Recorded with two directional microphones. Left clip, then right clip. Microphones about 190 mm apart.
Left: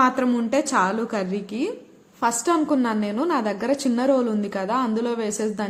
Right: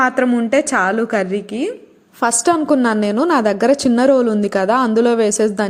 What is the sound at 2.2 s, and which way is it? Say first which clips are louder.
A woman's voice: right 6 dB; 40° right (ahead or behind).